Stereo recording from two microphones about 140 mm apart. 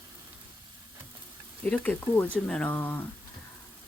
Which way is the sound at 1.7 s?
10° left (ahead or behind).